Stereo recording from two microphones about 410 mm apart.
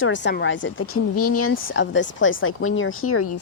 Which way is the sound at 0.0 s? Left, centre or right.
Left.